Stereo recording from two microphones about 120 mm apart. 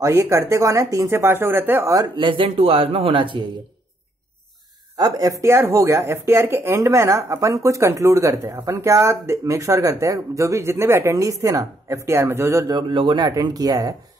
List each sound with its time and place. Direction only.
0.0 s speech: 25° right (ahead or behind)
2.1 s speech: 45° right (ahead or behind)
4.9 s speech: 35° right (ahead or behind)